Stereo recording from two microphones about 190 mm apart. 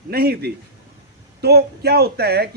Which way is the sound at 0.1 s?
55° right (ahead or behind).